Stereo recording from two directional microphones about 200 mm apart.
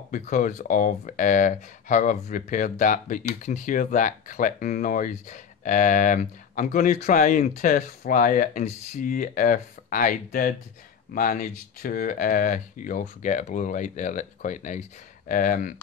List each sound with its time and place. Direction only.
0.1 s speech: 40° left (ahead or behind)